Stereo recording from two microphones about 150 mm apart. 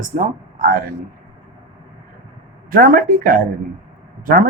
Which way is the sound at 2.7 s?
70° right (ahead or behind).